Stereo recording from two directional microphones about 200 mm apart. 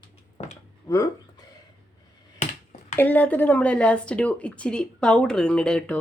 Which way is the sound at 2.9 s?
10° left (ahead or behind).